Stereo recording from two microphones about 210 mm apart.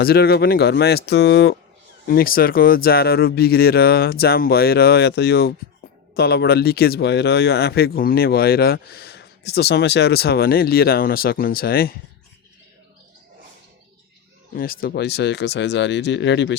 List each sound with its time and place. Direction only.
0.0 s speech: 50° left (ahead or behind)
2.0 s speech: 45° left (ahead or behind)
14.5 s speech: 45° left (ahead or behind)